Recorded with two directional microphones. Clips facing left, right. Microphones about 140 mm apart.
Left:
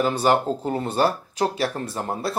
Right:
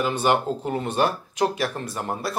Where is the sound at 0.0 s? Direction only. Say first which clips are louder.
Left 2 dB; 35° left (ahead or behind).